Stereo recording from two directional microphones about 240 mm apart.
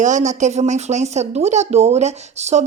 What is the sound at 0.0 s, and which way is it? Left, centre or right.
Speech, right.